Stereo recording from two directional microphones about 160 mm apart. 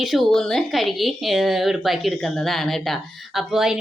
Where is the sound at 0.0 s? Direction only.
Centre (ahead or behind).